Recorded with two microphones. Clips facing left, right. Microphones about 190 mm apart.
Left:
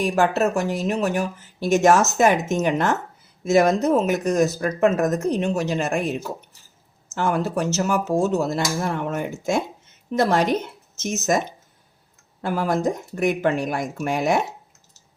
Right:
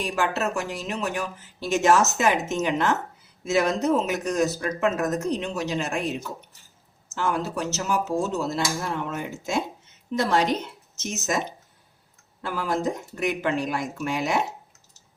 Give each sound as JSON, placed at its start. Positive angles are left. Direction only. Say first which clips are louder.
{"t": 0.0, "sound": "speech", "louder": "left 6 dB", "side_deg": 50}
{"t": 7.1, "sound": "speech", "louder": "left 4 dB", "side_deg": 55}
{"t": 12.4, "sound": "speech", "louder": "left 5 dB", "side_deg": 50}